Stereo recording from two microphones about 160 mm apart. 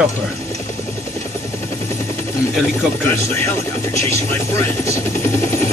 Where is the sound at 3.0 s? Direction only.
15° left (ahead or behind).